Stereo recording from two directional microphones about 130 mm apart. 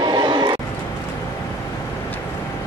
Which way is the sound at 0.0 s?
35° right (ahead or behind).